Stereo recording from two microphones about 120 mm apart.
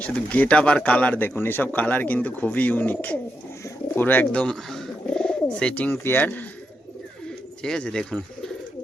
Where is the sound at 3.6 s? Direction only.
15° left (ahead or behind).